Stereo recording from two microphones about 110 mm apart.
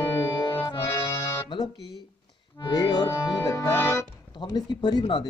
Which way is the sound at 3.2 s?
30° left (ahead or behind).